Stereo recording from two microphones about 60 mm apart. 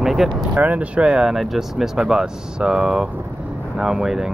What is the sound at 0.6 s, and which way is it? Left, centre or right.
Speech, right.